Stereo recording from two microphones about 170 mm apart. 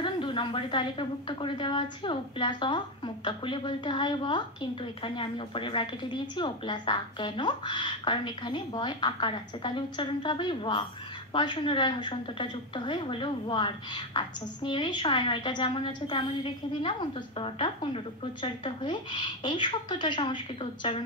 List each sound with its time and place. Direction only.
0.0 s a woman's voice: 30° left (ahead or behind)